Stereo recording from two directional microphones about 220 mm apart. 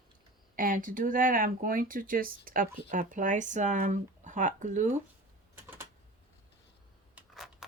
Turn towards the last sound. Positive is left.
turn(degrees=0)  # may be behind; listen again after turning